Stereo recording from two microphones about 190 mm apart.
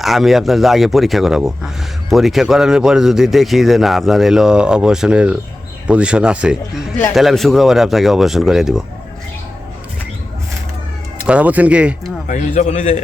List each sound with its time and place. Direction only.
0.0 s speech: centre (ahead or behind)
11.3 s speech: 5° right (ahead or behind)
12.3 s a man's voice: 40° left (ahead or behind)